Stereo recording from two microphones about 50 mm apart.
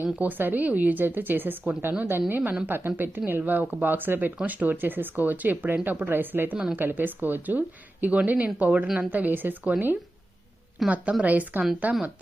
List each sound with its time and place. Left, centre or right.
0.0 s speech: right
10.8 s speech: right